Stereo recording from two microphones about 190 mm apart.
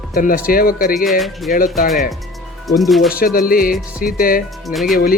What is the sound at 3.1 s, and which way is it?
Speech, 50° left (ahead or behind).